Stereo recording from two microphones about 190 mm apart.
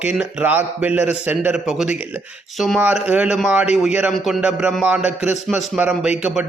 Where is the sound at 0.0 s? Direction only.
5° right (ahead or behind).